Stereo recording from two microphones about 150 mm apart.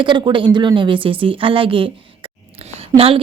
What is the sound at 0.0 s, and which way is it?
Speech, 30° right (ahead or behind).